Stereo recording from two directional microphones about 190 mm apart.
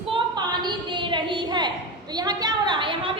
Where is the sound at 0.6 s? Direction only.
25° right (ahead or behind).